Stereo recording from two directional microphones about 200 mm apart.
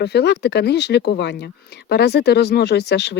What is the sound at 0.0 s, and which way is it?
Speech, 55° left (ahead or behind).